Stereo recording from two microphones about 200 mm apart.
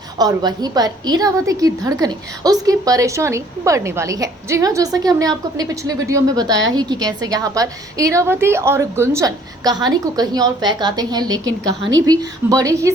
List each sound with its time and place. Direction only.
0.2 s a woman's voice: 20° right (ahead or behind)